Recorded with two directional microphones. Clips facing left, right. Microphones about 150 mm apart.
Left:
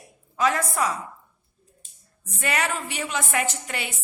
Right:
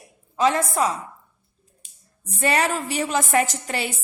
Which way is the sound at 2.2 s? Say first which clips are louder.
Right 5 dB; 30° right (ahead or behind).